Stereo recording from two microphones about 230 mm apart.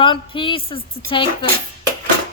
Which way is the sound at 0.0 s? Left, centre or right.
Left.